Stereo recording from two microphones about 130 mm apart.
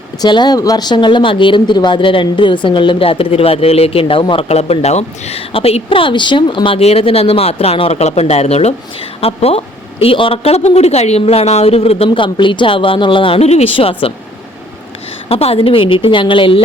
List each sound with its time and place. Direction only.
0.2 s speech: 35° left (ahead or behind)
15.3 s speech: 50° left (ahead or behind)